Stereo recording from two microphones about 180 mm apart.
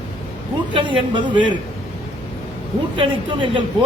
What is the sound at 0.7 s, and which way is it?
Speech, 25° right (ahead or behind).